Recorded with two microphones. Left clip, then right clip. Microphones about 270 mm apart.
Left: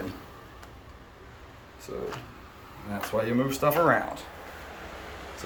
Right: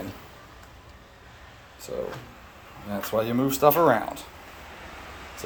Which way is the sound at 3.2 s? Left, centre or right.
Right.